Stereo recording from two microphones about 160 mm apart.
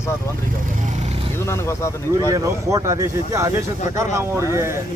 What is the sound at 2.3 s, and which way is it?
Speech, 20° right (ahead or behind).